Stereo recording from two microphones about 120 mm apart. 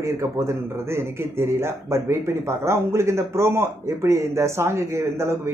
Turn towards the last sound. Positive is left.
turn(degrees=-20)  # may be behind; listen again after turning